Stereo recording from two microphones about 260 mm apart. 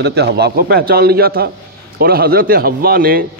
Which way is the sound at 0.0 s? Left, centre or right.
Right.